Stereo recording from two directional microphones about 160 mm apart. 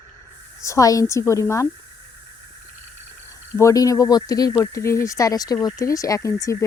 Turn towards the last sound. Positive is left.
turn(degrees=20)  # may be behind; listen again after turning